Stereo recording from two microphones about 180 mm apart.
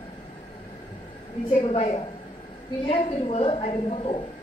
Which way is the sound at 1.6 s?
30° left (ahead or behind).